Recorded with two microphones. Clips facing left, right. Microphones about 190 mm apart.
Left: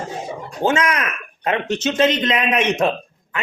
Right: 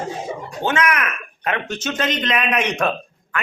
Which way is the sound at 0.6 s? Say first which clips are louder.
Left 2 dB; 25° left (ahead or behind).